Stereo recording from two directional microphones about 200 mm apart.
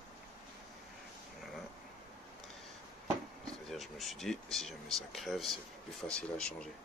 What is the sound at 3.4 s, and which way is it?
Speech, centre (ahead or behind).